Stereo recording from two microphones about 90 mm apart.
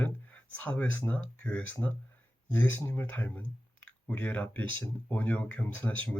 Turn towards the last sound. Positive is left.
turn(degrees=15)  # may be behind; listen again after turning